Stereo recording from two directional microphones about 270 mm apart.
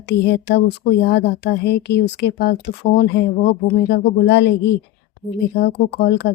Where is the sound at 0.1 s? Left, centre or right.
Left.